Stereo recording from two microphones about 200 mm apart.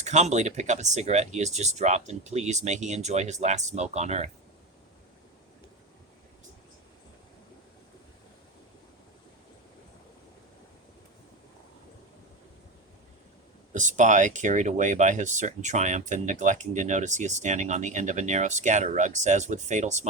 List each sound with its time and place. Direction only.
0.0 s speech: 35° right (ahead or behind)
13.7 s speech: 35° right (ahead or behind)